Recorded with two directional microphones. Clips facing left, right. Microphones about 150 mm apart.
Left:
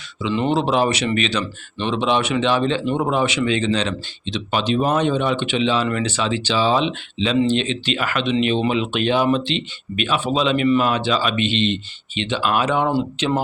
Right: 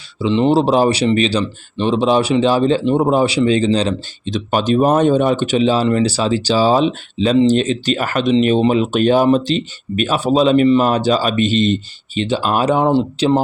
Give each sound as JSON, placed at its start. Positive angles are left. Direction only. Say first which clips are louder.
{"t": 0.2, "sound": "speech", "louder": "right 6 dB", "side_deg": -30}